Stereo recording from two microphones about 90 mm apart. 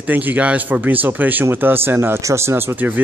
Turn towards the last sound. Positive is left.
turn(degrees=-20)  # may be behind; listen again after turning